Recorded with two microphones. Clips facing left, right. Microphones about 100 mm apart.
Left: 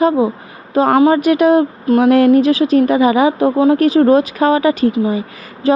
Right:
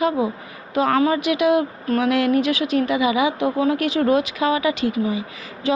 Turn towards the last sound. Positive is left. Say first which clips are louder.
# left 7 dB
turn(degrees=40)  # may be behind; listen again after turning